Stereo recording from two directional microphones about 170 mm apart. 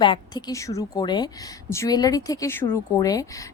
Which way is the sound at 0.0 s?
25° left (ahead or behind).